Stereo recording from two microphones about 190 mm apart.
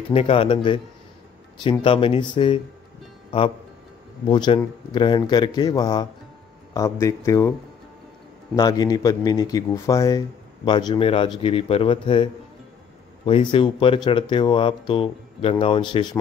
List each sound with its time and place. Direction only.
0.1 s a man's voice: 30° left (ahead or behind)
8.5 s a man's voice: 20° left (ahead or behind)